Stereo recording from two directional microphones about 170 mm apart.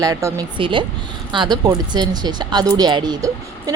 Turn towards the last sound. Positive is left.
turn(degrees=-20)  # may be behind; listen again after turning